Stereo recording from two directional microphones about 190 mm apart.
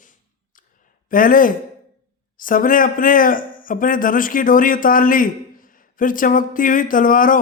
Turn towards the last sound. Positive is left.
turn(degrees=45)  # may be behind; listen again after turning